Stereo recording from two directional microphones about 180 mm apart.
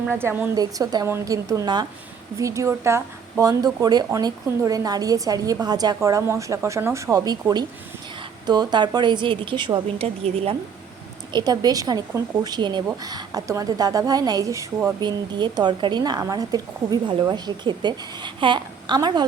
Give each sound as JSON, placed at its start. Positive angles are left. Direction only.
{"t": 0.1, "sound": "speech", "side_deg": -10}
{"t": 11.3, "sound": "speech", "side_deg": -25}